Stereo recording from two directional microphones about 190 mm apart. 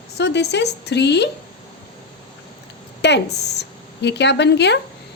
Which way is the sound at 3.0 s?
65° left (ahead or behind).